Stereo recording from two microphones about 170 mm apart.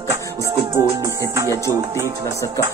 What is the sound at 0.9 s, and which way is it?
Music, 20° right (ahead or behind).